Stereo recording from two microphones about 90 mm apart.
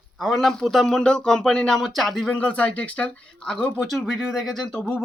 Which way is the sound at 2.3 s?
15° left (ahead or behind).